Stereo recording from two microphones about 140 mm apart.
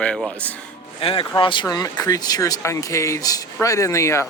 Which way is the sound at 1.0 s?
40° left (ahead or behind).